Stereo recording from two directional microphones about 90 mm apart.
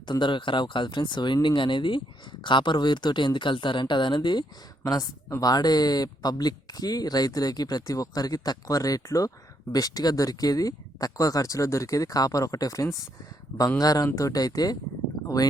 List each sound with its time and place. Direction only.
0.0 s speech: 60° left (ahead or behind)
5.4 s speech: 45° left (ahead or behind)